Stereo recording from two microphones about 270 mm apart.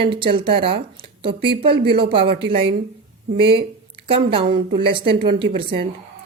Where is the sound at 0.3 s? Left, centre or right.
Centre.